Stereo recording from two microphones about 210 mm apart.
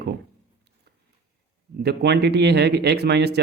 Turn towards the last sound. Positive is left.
turn(degrees=-50)  # may be behind; listen again after turning